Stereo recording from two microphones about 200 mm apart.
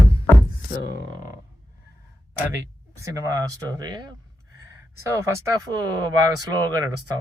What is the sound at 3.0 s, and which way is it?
Speech, 20° right (ahead or behind).